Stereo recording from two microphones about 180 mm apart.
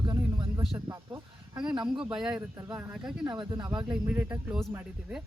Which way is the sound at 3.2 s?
25° right (ahead or behind).